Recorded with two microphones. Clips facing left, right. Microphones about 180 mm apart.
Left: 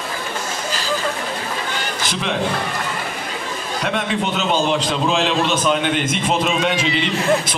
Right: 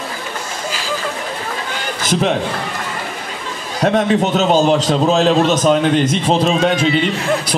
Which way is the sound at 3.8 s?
40° right (ahead or behind).